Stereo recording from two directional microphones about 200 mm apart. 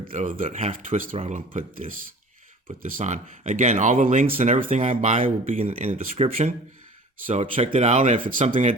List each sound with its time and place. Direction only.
0.0 s speech: 40° right (ahead or behind)
8.4 s speech: 25° right (ahead or behind)